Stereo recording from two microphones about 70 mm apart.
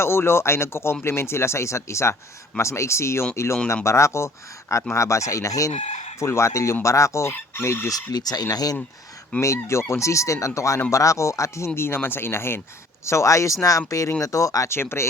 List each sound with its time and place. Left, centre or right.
0.0 s speech: left
7.3 s chicken: left
8.1 s speech: left
9.4 s speech: left
13.1 s speech: left
14.7 s speech: left